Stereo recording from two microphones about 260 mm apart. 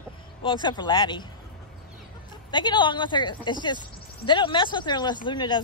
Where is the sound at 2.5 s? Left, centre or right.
Centre.